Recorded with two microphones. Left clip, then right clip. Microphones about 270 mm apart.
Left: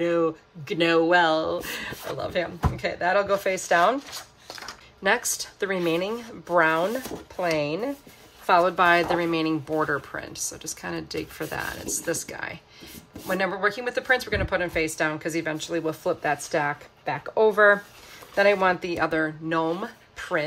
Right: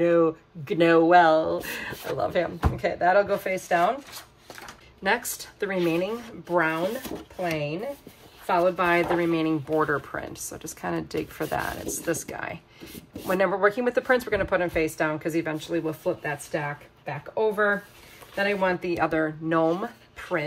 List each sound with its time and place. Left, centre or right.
0.0 s speech: centre
5.0 s speech: centre; by 17.6 s left
18.3 s speech: centre